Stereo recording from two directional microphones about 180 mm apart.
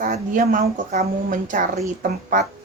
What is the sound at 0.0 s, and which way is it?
A woman's voice, 45° right (ahead or behind).